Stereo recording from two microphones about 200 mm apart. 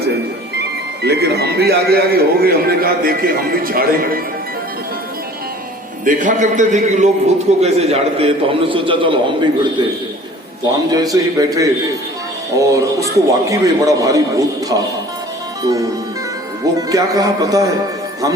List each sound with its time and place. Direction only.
1.0 s a man's voice: 55° right (ahead or behind)
6.1 s a man's voice: 40° right (ahead or behind)
10.9 s a man's voice: 20° right (ahead or behind)
16.9 s a man's voice: 15° right (ahead or behind)